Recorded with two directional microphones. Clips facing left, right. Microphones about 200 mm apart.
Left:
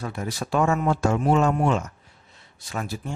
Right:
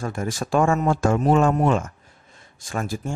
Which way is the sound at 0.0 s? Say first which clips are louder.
Right 3 dB; 45° right (ahead or behind).